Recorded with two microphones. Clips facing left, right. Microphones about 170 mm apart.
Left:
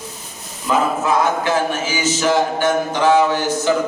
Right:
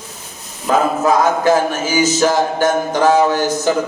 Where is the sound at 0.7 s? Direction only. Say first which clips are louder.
Right 3 dB; 40° right (ahead or behind).